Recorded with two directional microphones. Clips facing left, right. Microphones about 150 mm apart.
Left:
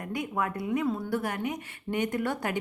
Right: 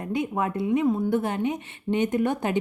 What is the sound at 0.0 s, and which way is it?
A woman's voice, 25° right (ahead or behind).